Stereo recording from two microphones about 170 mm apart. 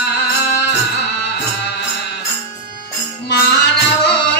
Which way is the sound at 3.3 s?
90° left.